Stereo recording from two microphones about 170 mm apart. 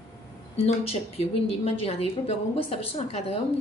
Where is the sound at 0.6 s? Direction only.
35° left (ahead or behind).